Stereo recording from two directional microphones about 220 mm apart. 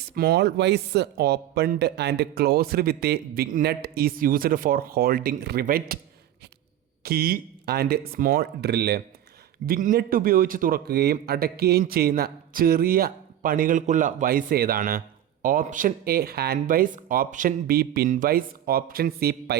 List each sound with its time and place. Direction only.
0.0 s speech: 45° right (ahead or behind)
7.0 s a man's voice: 45° right (ahead or behind)